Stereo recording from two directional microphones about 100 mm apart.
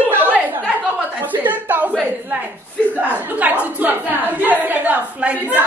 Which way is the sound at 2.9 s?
15° right (ahead or behind).